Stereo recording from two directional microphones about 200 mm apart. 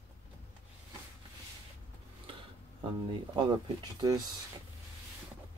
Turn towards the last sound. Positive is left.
turn(degrees=-20)  # may be behind; listen again after turning